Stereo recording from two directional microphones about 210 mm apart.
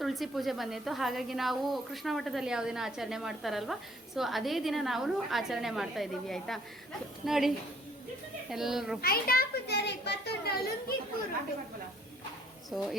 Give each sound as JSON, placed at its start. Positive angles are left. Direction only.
{"t": 0.0, "sound": "a woman's voice", "side_deg": 0}
{"t": 9.0, "sound": "a child's voice", "side_deg": 45}
{"t": 12.7, "sound": "a woman's voice", "side_deg": 0}